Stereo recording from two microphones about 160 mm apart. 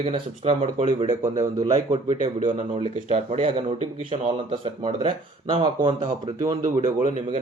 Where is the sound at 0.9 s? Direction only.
25° right (ahead or behind).